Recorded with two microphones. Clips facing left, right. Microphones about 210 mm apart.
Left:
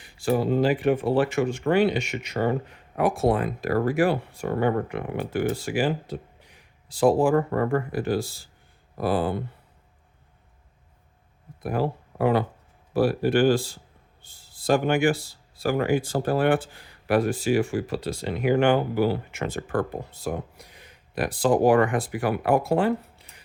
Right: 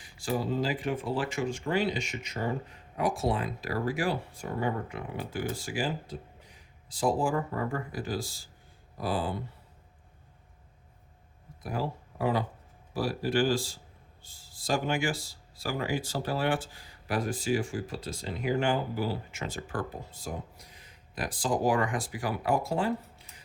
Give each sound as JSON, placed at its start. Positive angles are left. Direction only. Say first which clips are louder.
{"t": 0.0, "sound": "speech", "louder": "left 8 dB", "side_deg": 60}
{"t": 11.6, "sound": "speech", "louder": "left 7 dB", "side_deg": 60}